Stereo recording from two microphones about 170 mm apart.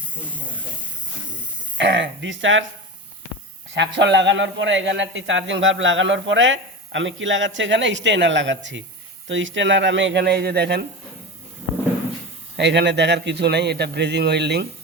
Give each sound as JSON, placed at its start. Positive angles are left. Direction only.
{"t": 1.8, "sound": "a man's voice", "side_deg": -90}
{"t": 3.8, "sound": "a man's voice", "side_deg": -90}
{"t": 12.5, "sound": "a man's voice", "side_deg": -90}